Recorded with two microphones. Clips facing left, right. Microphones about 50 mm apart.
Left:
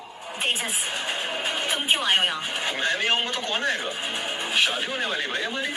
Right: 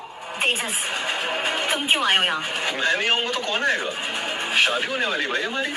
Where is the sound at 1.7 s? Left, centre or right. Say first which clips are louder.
Right 2 dB; right.